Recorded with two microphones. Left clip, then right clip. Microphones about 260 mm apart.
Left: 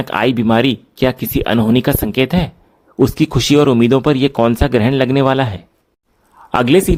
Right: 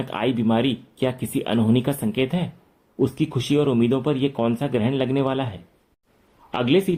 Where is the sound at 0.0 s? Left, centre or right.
Left.